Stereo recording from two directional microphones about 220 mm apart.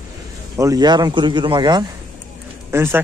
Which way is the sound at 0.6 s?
15° right (ahead or behind).